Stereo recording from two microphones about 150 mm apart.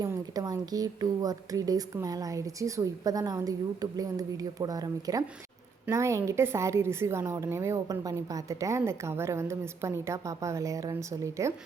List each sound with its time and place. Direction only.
0.0 s a woman's voice: 25° right (ahead or behind)